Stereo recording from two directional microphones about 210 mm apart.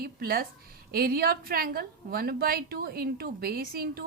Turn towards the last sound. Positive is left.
turn(degrees=-45)  # may be behind; listen again after turning